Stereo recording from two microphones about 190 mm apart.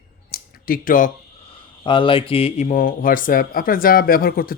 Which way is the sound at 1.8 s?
25° left (ahead or behind).